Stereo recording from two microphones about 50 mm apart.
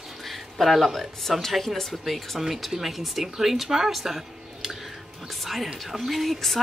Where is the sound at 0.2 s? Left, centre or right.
Centre.